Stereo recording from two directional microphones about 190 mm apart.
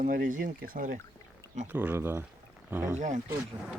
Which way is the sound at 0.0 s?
45° right (ahead or behind).